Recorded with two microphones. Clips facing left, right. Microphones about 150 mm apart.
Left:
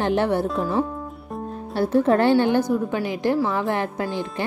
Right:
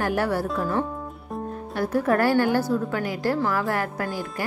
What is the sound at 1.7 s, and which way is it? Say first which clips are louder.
A woman's voice: left 4 dB; 30° left (ahead or behind).